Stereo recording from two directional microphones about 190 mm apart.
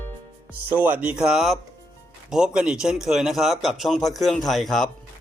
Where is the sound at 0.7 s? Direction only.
10° right (ahead or behind).